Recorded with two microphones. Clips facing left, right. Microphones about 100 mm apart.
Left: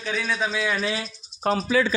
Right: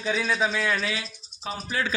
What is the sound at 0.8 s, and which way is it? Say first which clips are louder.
Speech: left 3 dB; 30° left (ahead or behind).